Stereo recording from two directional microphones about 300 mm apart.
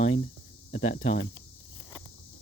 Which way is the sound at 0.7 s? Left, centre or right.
Left.